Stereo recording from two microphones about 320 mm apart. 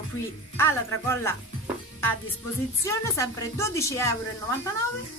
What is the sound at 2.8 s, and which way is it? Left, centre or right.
A woman's voice, centre.